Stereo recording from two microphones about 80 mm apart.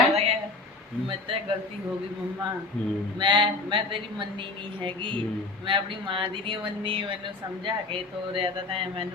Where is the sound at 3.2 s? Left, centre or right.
Right.